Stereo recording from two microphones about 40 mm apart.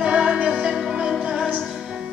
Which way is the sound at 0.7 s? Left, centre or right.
Centre.